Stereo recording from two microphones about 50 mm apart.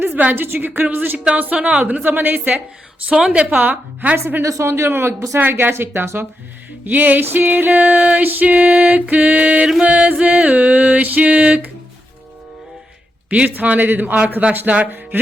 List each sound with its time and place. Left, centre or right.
0.0 s a sound: right
0.4 s music: right
1.8 s music: right
3.1 s music: centre
3.5 s music: right
4.4 s a woman's voice: right
6.8 s music: right
13.3 s music: right